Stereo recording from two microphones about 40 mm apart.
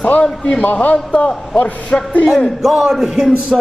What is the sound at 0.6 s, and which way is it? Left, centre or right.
Speech, left.